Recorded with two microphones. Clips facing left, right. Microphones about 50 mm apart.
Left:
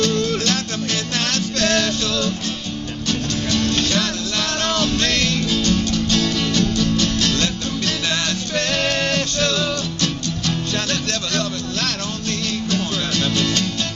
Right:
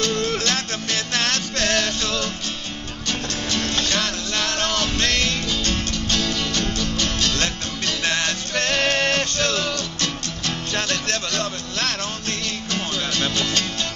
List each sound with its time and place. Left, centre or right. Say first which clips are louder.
0.2 s music: left 2 dB; right
3.5 s music: left 3 dB; right
6.1 s music: left 2 dB; centre
8.0 s music: even; right
10.4 s music: left 1 dB; right
11.3 s music: left 3 dB; right